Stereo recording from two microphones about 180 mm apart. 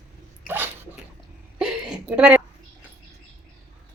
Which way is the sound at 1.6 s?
5° right (ahead or behind).